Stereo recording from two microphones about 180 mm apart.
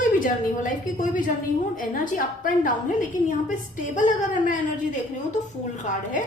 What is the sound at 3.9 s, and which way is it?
A woman's voice, 45° left (ahead or behind).